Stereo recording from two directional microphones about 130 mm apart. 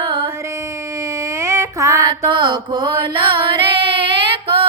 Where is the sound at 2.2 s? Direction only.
40° right (ahead or behind).